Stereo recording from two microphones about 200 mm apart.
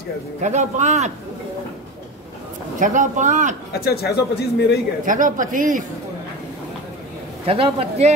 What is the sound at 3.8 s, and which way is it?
Speech, 50° left (ahead or behind).